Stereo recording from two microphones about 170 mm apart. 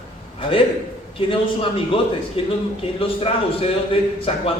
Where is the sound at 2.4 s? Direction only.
30° left (ahead or behind).